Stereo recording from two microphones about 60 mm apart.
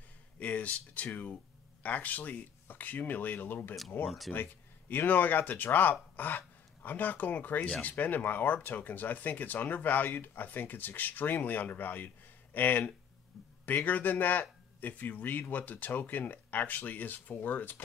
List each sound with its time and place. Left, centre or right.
0.4 s speech: left